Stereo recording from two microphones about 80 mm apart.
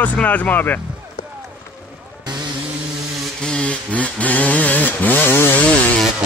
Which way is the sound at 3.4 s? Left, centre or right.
Centre.